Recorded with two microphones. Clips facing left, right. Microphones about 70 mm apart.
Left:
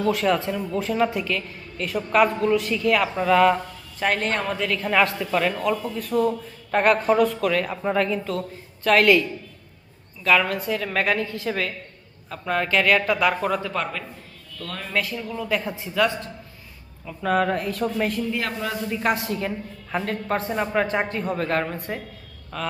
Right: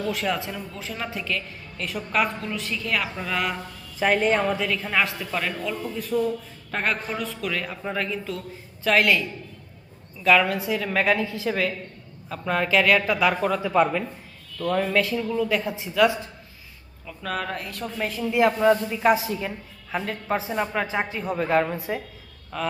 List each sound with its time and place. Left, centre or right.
0.0 s a woman's voice: centre
7.6 s speech: centre
7.9 s a woman's voice: centre
10.2 s a woman's voice: centre
13.6 s speech: centre
14.9 s a woman's voice: centre
17.1 s a woman's voice: centre
18.3 s a man's voice: centre
18.9 s a woman's voice: centre